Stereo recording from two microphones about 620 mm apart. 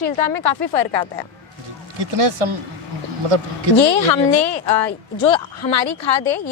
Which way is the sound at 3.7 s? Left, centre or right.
Left.